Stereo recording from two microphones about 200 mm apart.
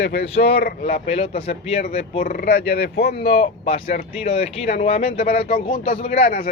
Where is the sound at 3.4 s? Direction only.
30° left (ahead or behind).